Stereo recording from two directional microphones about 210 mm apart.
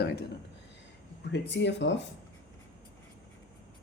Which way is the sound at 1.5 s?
55° left (ahead or behind).